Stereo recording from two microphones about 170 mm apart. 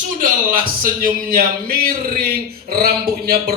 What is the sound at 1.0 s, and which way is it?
Speech, 60° right (ahead or behind).